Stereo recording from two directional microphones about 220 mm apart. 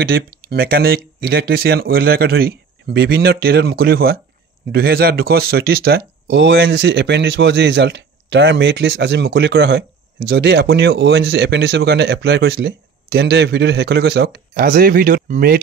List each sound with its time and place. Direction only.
0.0 s speech: 45° right (ahead or behind)